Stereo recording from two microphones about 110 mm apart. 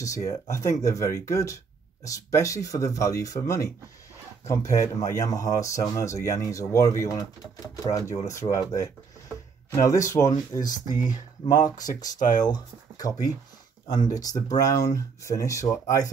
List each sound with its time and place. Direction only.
0.3 s speech: 30° left (ahead or behind)